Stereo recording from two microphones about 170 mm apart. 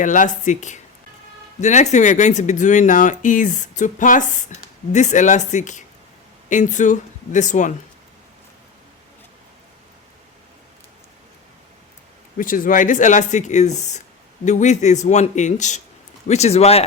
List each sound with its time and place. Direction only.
0.0 s speech: 50° left (ahead or behind)
12.4 s speech: 55° left (ahead or behind); by 16.8 s 35° left (ahead or behind)